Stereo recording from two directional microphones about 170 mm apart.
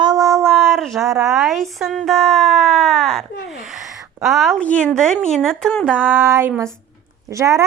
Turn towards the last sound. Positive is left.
turn(degrees=-20)  # may be behind; listen again after turning